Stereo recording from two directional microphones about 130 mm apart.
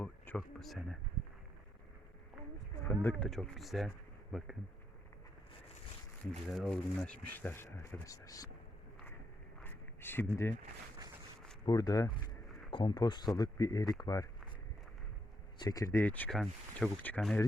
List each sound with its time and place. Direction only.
0.3 s speech: centre (ahead or behind)
2.8 s speech: 15° left (ahead or behind)
3.2 s speech: 5° left (ahead or behind)
6.5 s speech: centre (ahead or behind)
6.7 s speech: 10° left (ahead or behind); by 8.4 s 25° left (ahead or behind)
9.6 s a sound: 15° left (ahead or behind)
11.6 s speech: 30° left (ahead or behind)
15.5 s speech: 30° left (ahead or behind)
16.0 s speech: 15° left (ahead or behind)